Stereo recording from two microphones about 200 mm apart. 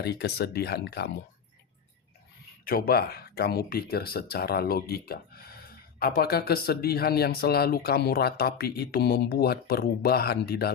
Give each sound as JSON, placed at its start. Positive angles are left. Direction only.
{"t": 0.0, "sound": "speech", "side_deg": 55}
{"t": 2.6, "sound": "speech", "side_deg": 50}